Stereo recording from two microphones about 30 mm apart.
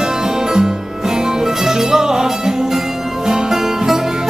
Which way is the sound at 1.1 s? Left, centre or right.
Centre.